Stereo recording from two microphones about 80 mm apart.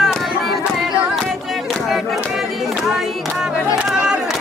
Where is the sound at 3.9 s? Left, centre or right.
Centre.